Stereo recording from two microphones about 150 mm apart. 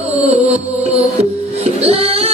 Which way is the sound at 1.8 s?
40° right (ahead or behind).